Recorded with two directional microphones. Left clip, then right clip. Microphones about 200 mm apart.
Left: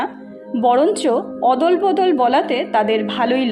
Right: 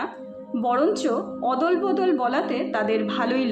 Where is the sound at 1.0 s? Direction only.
15° left (ahead or behind).